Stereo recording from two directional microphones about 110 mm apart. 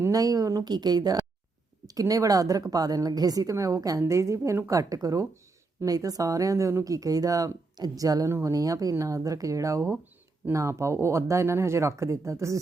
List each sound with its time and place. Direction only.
0.0 s speech: 35° right (ahead or behind)